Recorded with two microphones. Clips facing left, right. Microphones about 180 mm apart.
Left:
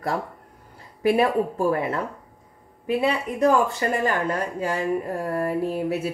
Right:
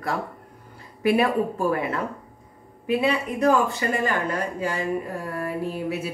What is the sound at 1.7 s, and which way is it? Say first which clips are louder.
Speech: left 1 dB; 35° left (ahead or behind).